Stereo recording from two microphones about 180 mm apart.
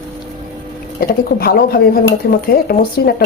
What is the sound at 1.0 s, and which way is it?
Speech, 55° left (ahead or behind).